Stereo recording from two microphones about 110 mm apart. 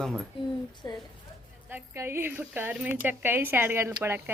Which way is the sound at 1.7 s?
20° right (ahead or behind).